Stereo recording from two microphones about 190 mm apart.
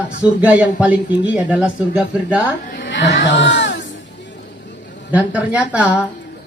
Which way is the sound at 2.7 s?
65° left (ahead or behind).